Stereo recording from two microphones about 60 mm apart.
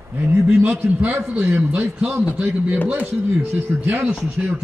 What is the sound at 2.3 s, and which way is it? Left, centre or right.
A man's voice, right.